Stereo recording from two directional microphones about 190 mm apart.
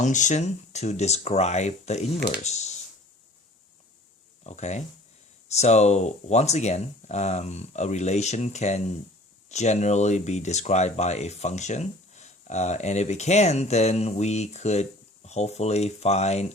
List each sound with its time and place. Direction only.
0.0 s speech: 40° left (ahead or behind)
4.4 s speech: 35° left (ahead or behind)